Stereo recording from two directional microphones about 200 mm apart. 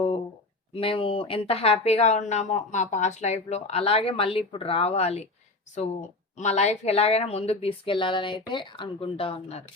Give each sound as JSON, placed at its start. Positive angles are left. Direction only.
{"t": 0.7, "sound": "speech", "side_deg": 30}
{"t": 6.3, "sound": "speech", "side_deg": 35}